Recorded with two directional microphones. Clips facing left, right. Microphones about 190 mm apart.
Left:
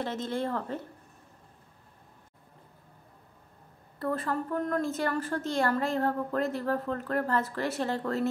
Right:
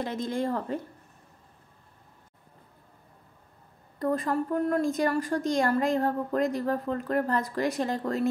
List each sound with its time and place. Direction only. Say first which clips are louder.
0.0 s a woman's voice: right 2 dB; 15° right (ahead or behind)
4.0 s a woman's voice: right 4 dB; 15° right (ahead or behind)